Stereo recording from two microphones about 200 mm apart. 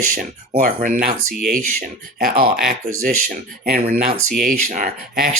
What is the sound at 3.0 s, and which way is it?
Speech, 45° right (ahead or behind).